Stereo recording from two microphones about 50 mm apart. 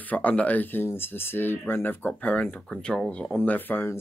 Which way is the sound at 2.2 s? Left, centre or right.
Left.